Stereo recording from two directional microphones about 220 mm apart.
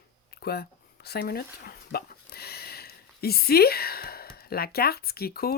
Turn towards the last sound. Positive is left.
turn(degrees=45)  # may be behind; listen again after turning